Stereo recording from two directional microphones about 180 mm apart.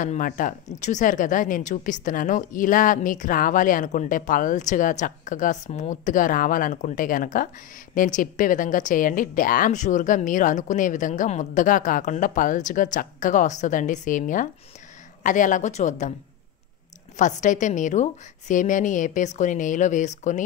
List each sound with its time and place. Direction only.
0.0 s speech: 45° left (ahead or behind)
17.2 s speech: 45° left (ahead or behind)